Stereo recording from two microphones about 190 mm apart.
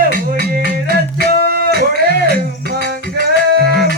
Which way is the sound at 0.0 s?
50° right (ahead or behind).